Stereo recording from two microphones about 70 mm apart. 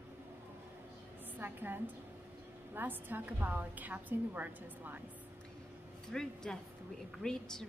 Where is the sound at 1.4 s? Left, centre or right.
Right.